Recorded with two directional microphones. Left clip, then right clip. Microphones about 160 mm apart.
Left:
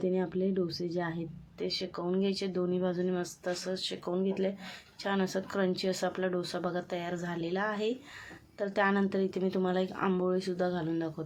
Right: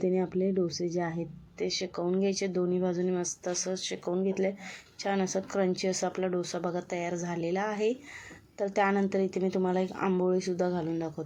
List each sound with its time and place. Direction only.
0.0 s speech: 20° right (ahead or behind)
2.0 s speech: 15° right (ahead or behind)
10.3 s speech: 20° right (ahead or behind)